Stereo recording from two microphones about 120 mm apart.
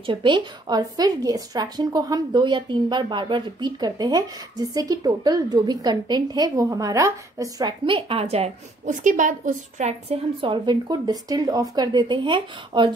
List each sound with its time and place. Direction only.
0.0 s a woman's voice: 45° right (ahead or behind)
7.8 s a woman's voice: 50° right (ahead or behind)
8.8 s a woman's voice: 90° right
10.0 s a woman's voice: 50° right (ahead or behind)